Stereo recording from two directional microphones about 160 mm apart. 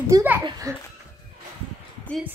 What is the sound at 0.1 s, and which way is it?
Speech, 25° right (ahead or behind).